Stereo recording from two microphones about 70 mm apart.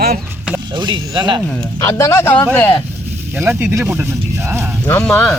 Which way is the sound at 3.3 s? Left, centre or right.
Right.